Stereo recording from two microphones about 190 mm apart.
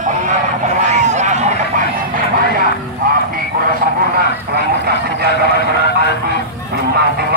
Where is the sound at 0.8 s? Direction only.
40° right (ahead or behind).